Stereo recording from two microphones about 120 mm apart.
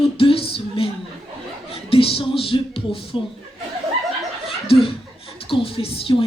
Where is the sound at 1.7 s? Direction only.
50° left (ahead or behind).